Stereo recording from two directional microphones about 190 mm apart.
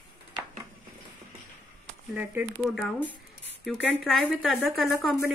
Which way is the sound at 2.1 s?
5° right (ahead or behind).